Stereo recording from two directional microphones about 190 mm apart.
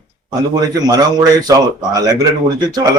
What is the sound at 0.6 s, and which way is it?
Speech, 20° right (ahead or behind).